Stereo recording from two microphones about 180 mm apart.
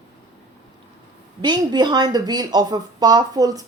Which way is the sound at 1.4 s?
25° right (ahead or behind).